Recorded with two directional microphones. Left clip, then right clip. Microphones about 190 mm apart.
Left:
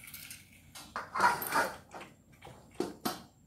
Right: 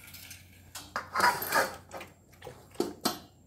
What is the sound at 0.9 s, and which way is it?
Mechanisms, 45° right (ahead or behind).